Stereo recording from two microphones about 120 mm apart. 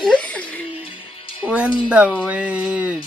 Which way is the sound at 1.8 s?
10° right (ahead or behind).